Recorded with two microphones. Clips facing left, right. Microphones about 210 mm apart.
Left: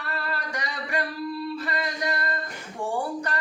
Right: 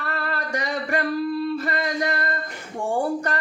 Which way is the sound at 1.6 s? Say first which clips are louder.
Right 5 dB; 50° right (ahead or behind).